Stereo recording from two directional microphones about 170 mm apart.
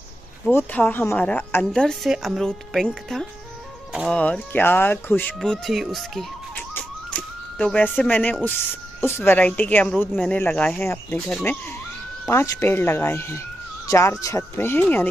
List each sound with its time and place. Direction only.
0.5 s a woman's voice: 10° left (ahead or behind)
4.2 s speech: 10° left (ahead or behind)
6.7 s a sound: 5° left (ahead or behind)
9.0 s speech: 10° left (ahead or behind)